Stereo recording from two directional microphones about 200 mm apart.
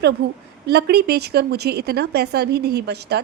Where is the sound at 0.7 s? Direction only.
55° right (ahead or behind).